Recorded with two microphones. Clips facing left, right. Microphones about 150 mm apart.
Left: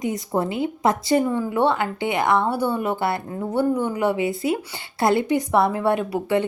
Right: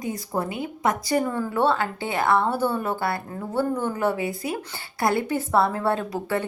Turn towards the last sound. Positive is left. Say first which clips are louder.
# left 5 dB
turn(degrees=15)  # may be behind; listen again after turning